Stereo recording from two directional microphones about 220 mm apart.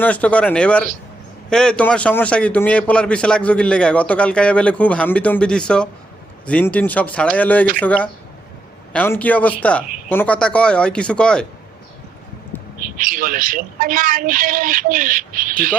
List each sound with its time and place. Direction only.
0.0 s a man's voice: 5° left (ahead or behind)
12.8 s speech: 40° right (ahead or behind)